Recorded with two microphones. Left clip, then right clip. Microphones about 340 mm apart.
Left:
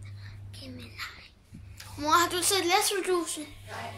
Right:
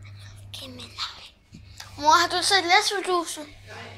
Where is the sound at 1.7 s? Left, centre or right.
Centre.